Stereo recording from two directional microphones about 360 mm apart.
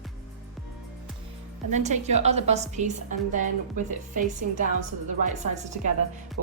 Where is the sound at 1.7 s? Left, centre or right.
Centre.